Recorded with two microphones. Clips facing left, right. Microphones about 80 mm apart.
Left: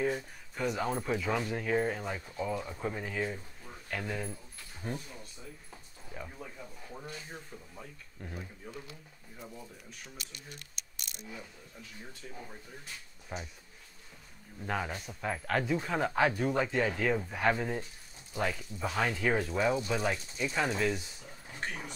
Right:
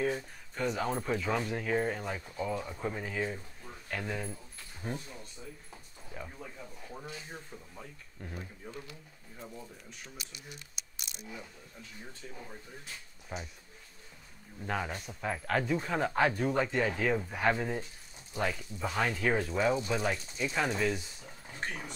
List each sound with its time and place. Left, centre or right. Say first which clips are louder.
0.0 s speech: even; centre
6.1 s a sound: even; centre
7.2 s speech: even; centre
13.3 s speech: even; centre
14.6 s speech: even; centre